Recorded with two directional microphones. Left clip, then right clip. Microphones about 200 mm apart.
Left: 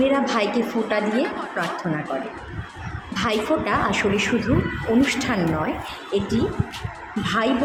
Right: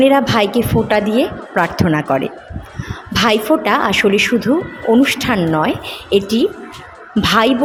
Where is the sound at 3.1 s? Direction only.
45° right (ahead or behind).